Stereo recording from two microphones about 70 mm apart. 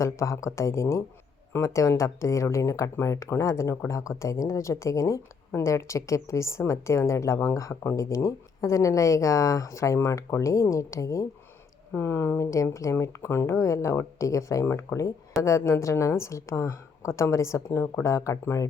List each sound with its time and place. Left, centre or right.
0.0 s a woman's voice: left
11.9 s a woman's voice: left